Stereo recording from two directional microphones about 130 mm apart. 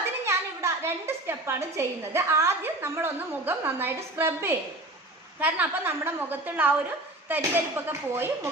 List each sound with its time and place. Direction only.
0.3 s a woman's voice: 20° right (ahead or behind)